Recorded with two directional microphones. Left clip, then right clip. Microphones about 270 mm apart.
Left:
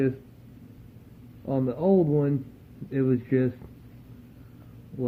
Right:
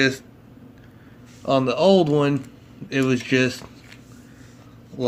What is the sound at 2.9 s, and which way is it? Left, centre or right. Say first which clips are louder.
Speech: right 5 dB; centre.